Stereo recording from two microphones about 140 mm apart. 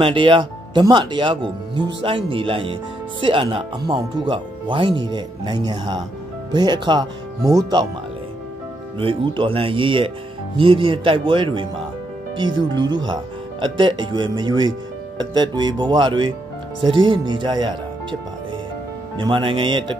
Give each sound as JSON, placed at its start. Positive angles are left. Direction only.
{"t": 0.0, "sound": "speech", "side_deg": -35}
{"t": 8.9, "sound": "speech", "side_deg": -40}
{"t": 19.1, "sound": "speech", "side_deg": -35}